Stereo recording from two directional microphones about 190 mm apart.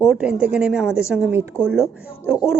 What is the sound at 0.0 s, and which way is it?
Speech, 5° right (ahead or behind).